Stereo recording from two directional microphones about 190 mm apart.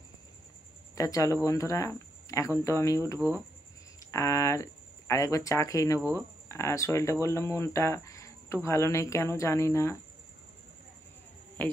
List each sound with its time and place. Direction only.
0.9 s speech: 15° left (ahead or behind)
5.9 s speech: 15° right (ahead or behind)
6.5 s speech: 15° left (ahead or behind)